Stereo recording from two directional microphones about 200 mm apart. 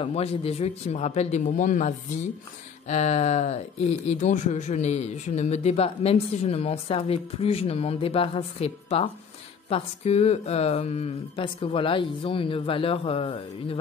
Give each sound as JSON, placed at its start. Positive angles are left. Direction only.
{"t": 0.0, "sound": "speech", "side_deg": 30}